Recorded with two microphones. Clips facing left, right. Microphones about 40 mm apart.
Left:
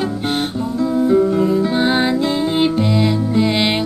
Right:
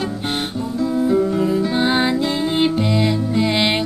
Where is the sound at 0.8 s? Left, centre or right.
Centre.